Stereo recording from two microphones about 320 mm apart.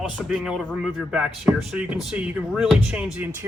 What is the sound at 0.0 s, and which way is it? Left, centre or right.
Speech, centre.